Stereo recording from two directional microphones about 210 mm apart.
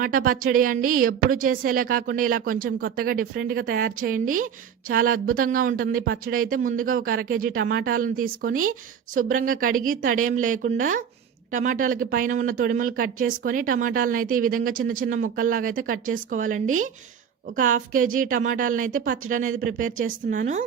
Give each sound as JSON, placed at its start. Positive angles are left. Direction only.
{"t": 0.0, "sound": "speech", "side_deg": -40}